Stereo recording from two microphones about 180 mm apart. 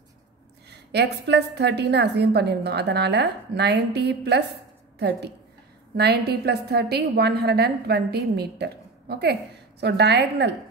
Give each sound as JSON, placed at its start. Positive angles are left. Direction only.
{"t": 0.7, "sound": "a woman's voice", "side_deg": -70}